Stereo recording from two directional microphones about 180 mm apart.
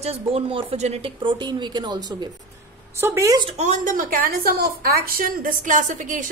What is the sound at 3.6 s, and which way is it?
A woman's voice, 45° right (ahead or behind).